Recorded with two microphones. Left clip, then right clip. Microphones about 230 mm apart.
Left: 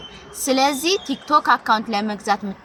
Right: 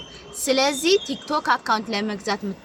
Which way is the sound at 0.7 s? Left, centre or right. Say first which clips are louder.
Right 1 dB; centre.